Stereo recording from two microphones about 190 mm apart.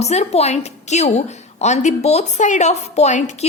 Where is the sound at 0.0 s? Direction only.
35° left (ahead or behind).